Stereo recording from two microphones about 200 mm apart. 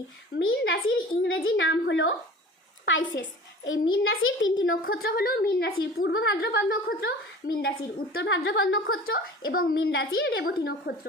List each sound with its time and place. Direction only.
0.3 s a woman's voice: 70° left (ahead or behind)
2.9 s a woman's voice: 75° left (ahead or behind)
3.7 s a child's voice: 85° left
4.9 s a woman's voice: 50° left (ahead or behind)
8.1 s a woman's voice: 65° left (ahead or behind); by 9.1 s 85° left
9.1 s a woman's voice: 50° left (ahead or behind)